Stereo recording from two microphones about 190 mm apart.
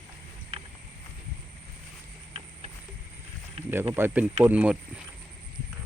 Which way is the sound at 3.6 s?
30° right (ahead or behind).